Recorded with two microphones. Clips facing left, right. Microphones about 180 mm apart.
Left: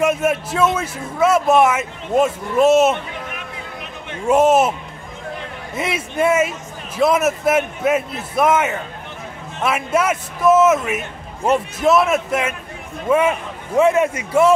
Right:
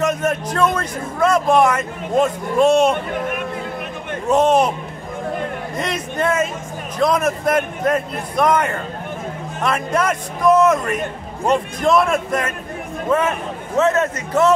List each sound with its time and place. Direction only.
0.0 s a man's voice: 10° left (ahead or behind)
3.1 s a sound: 50° right (ahead or behind)
4.3 s a man's voice: 5° left (ahead or behind)
5.8 s a man's voice: 5° left (ahead or behind)